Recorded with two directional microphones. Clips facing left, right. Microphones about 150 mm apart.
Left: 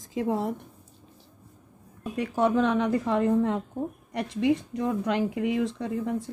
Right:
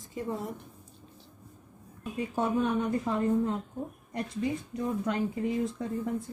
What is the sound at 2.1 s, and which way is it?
Speech, 85° left.